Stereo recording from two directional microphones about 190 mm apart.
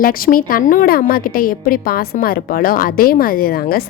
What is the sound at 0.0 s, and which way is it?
A woman's voice, 50° left (ahead or behind).